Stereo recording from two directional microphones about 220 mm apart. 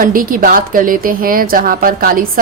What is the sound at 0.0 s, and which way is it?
A woman's voice, 40° right (ahead or behind).